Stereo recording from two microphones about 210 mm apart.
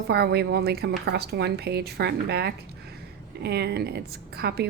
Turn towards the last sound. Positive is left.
turn(degrees=-50)  # may be behind; listen again after turning